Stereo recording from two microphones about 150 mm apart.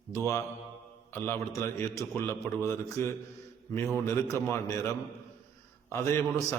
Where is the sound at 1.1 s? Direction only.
15° left (ahead or behind).